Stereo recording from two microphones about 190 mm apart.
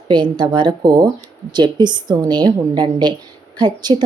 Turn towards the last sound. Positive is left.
turn(degrees=-25)  # may be behind; listen again after turning